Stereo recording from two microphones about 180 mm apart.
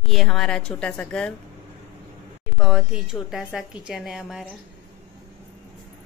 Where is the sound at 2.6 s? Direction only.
Centre (ahead or behind).